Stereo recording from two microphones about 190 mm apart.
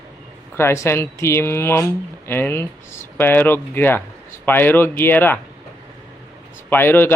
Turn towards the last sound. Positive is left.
turn(degrees=10)  # may be behind; listen again after turning